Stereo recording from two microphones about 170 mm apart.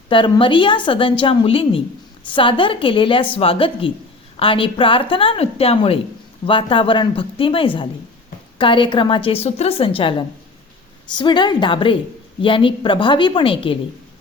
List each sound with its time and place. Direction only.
0.1 s a woman's voice: 30° left (ahead or behind)